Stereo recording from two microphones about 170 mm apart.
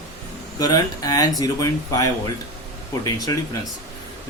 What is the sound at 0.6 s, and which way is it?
Speech, 25° left (ahead or behind).